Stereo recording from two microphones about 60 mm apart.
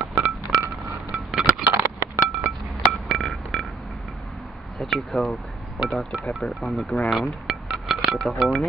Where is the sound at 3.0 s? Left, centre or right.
Centre.